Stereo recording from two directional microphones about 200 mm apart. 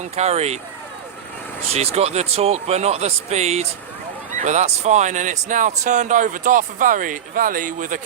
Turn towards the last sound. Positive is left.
turn(degrees=-40)  # may be behind; listen again after turning